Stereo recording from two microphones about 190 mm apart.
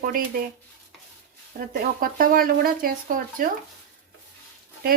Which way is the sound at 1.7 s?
50° right (ahead or behind).